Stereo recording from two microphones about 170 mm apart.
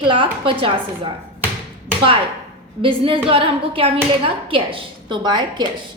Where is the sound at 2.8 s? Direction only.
30° right (ahead or behind).